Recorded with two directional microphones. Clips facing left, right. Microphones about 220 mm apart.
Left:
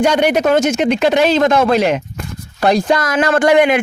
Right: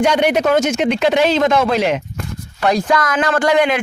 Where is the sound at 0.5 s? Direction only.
40° left (ahead or behind).